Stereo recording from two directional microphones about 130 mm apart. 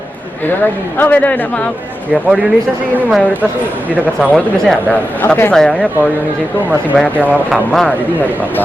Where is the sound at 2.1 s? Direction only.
10° right (ahead or behind).